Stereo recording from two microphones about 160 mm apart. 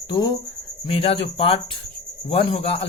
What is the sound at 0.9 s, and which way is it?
Speech, 35° left (ahead or behind).